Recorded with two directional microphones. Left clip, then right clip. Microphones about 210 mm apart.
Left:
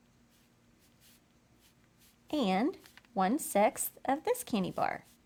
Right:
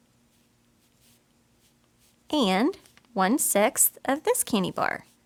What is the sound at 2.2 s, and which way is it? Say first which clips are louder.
Speech: right 7 dB; 35° right (ahead or behind).